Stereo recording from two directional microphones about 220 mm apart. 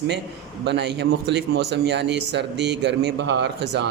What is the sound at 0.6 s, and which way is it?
A man's voice, 50° right (ahead or behind).